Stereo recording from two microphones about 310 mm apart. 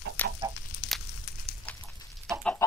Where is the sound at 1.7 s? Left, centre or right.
Centre.